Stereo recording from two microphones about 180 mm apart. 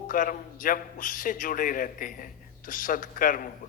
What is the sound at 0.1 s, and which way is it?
A woman's voice, 50° left (ahead or behind).